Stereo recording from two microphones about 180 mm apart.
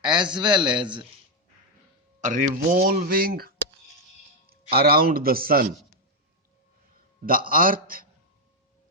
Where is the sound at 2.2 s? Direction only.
50° right (ahead or behind).